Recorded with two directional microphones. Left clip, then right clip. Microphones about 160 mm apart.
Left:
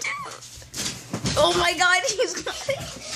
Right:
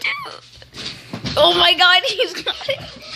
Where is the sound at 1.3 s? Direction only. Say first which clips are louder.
Right 7 dB; 10° right (ahead or behind).